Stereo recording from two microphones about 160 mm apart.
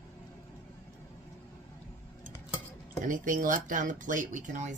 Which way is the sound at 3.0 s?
55° right (ahead or behind).